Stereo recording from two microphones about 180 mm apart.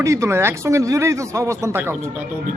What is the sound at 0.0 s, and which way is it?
A man's voice, 15° right (ahead or behind).